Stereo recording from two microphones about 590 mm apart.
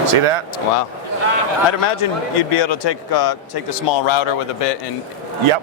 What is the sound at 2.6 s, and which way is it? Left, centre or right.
Speech, left.